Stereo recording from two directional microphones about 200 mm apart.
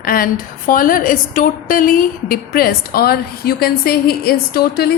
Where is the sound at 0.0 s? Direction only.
45° left (ahead or behind).